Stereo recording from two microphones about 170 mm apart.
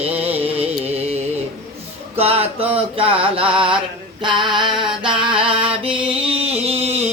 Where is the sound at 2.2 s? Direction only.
35° right (ahead or behind).